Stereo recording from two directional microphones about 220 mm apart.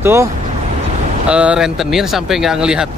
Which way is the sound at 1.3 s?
5° right (ahead or behind).